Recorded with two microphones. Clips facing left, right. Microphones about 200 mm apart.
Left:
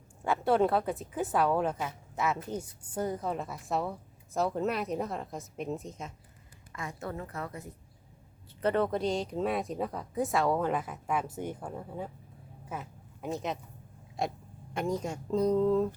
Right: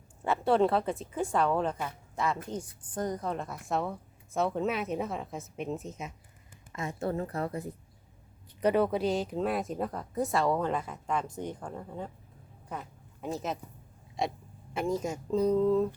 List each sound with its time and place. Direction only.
0.3 s a woman's voice: centre (ahead or behind)
6.7 s a woman's voice: 25° right (ahead or behind)
8.6 s a woman's voice: 10° right (ahead or behind)